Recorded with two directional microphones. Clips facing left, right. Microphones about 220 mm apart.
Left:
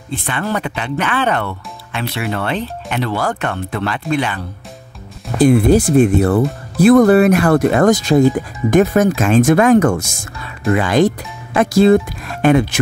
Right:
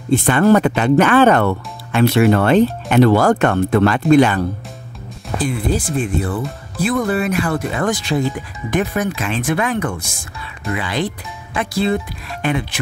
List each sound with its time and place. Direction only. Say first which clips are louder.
0.1 s speech: right 9 dB; 45° right (ahead or behind)
5.5 s speech: left 11 dB; 65° left (ahead or behind)
7.8 s speech: left 6 dB; 40° left (ahead or behind)